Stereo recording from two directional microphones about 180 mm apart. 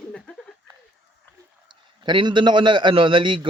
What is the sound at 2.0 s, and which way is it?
A man's voice, 25° right (ahead or behind).